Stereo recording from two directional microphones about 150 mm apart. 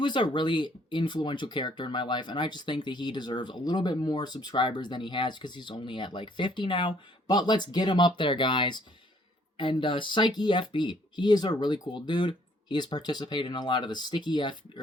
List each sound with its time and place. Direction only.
0.0 s speech: 30° left (ahead or behind)